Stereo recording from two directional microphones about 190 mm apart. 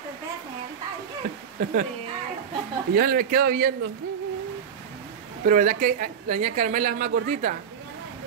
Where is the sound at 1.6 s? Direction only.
45° right (ahead or behind).